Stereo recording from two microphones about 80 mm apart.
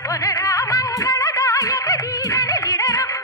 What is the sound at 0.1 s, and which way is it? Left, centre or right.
Music, left.